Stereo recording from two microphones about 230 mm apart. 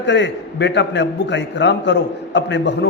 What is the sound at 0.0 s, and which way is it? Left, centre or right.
A man's voice, left.